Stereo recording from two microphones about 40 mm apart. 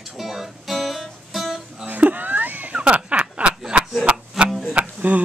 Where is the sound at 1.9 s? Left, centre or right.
Right.